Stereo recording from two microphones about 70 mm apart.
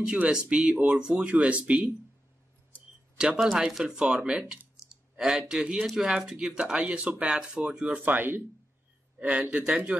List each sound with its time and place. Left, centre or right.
0.0 s speech: centre
3.2 s speech: centre